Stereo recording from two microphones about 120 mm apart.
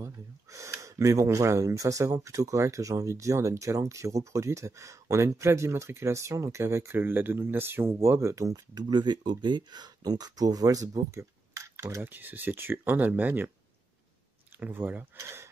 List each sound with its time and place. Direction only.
0.0 s speech: 25° right (ahead or behind)
14.6 s speech: 15° right (ahead or behind)